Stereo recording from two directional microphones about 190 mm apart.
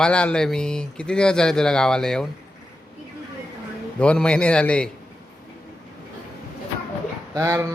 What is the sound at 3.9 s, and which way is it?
Speech, 5° left (ahead or behind).